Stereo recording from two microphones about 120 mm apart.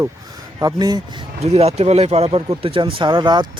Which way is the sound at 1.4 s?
60° right (ahead or behind).